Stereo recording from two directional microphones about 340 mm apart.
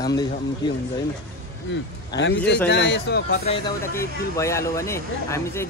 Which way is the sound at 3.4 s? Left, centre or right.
Centre.